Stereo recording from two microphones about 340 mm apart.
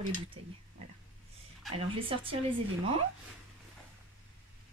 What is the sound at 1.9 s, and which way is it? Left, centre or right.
Speech, centre.